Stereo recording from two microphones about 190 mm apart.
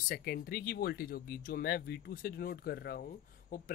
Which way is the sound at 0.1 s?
55° left (ahead or behind).